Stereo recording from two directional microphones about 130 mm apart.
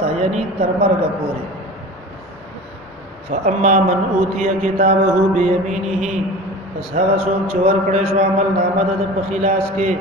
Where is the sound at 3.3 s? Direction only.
70° right (ahead or behind).